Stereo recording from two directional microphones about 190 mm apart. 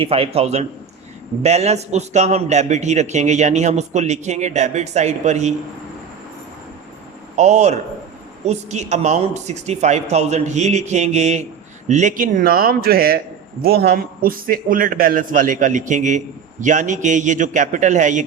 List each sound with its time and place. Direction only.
0.0 s a man's voice: 30° right (ahead or behind)
7.3 s a man's voice: 35° right (ahead or behind)